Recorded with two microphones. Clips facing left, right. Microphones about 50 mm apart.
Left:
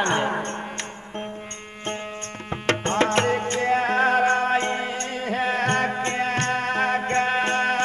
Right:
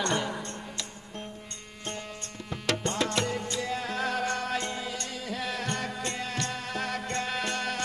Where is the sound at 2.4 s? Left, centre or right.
Left.